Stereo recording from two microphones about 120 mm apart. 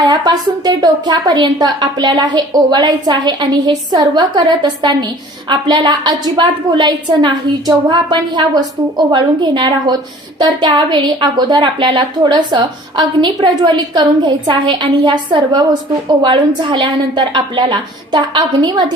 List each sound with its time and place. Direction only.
0.0 s a woman's voice: 35° right (ahead or behind)